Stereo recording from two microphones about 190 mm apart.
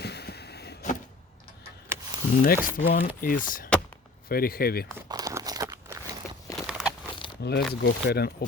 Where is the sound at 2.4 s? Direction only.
45° left (ahead or behind).